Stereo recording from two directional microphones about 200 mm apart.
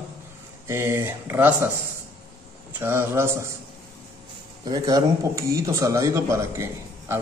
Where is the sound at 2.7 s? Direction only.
10° right (ahead or behind).